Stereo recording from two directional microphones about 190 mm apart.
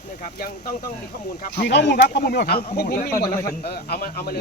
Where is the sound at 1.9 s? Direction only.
50° left (ahead or behind).